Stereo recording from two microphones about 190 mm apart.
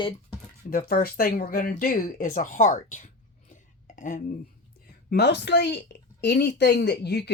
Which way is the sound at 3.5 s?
40° left (ahead or behind).